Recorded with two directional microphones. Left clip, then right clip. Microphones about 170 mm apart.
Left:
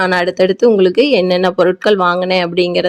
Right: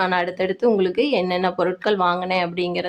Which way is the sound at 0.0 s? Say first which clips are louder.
Left 8 dB; 35° left (ahead or behind).